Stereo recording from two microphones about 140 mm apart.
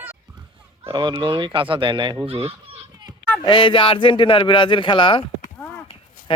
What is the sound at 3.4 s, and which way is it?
Speech, 35° left (ahead or behind).